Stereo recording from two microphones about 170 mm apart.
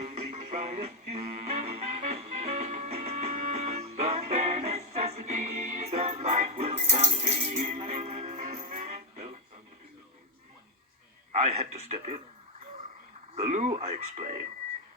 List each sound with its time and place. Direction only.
0.0 s music: 40° right (ahead or behind)
11.3 s a sound: 40° right (ahead or behind)
13.4 s speech: 45° right (ahead or behind)